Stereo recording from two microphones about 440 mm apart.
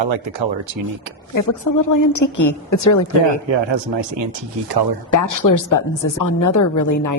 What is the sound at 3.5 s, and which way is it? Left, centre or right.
Speech, right.